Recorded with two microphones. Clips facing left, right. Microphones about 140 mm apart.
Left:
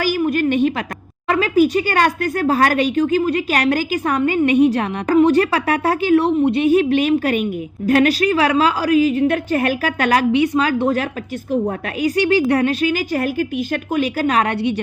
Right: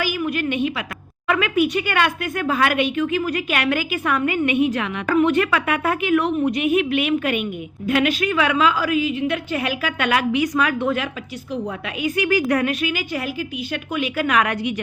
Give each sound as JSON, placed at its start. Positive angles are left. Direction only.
{"t": 0.0, "sound": "a sound", "side_deg": 40}
{"t": 1.3, "sound": "speech", "side_deg": 35}
{"t": 11.5, "sound": "a woman's voice", "side_deg": 50}
{"t": 12.1, "sound": "speech", "side_deg": 30}